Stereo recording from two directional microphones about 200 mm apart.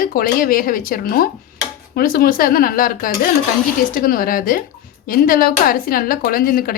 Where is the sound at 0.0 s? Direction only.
45° left (ahead or behind).